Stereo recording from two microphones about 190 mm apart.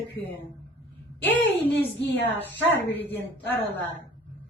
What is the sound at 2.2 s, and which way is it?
Speech, 10° left (ahead or behind).